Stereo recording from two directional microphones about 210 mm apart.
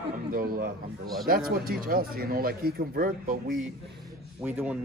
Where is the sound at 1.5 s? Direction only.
45° right (ahead or behind).